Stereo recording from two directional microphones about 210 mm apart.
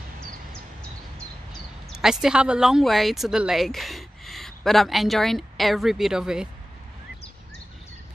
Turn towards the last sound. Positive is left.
turn(degrees=-5)  # may be behind; listen again after turning